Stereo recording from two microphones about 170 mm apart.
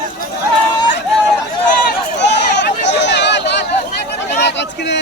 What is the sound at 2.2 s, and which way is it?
Chatter, 90° left.